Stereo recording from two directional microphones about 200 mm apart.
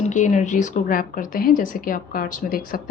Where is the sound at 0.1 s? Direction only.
40° left (ahead or behind).